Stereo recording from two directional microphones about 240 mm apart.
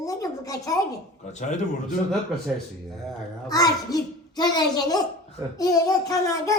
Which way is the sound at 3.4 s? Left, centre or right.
Centre.